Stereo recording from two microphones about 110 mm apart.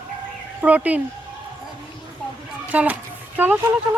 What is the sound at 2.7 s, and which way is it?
Speech, 15° right (ahead or behind).